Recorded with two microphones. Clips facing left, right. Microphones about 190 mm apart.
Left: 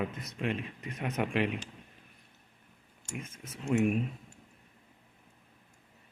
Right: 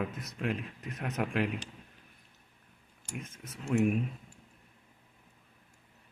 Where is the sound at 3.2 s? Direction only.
Centre (ahead or behind).